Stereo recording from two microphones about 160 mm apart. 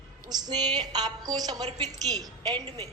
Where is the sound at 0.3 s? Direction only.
25° right (ahead or behind).